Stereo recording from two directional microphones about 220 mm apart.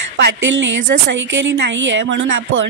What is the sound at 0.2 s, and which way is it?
A woman's voice, 55° right (ahead or behind).